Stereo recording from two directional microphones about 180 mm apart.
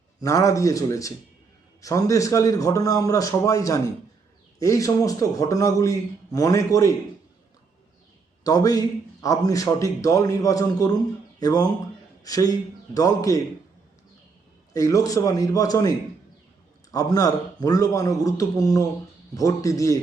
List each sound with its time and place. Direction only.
0.2 s a man's voice: 20° left (ahead or behind)
8.4 s a man's voice: 20° left (ahead or behind)
14.7 s a man's voice: 20° left (ahead or behind)